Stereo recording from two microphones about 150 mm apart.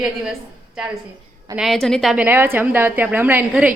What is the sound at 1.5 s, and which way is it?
Speech, centre (ahead or behind).